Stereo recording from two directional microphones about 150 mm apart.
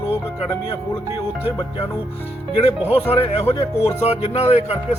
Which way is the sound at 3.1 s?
40° left (ahead or behind).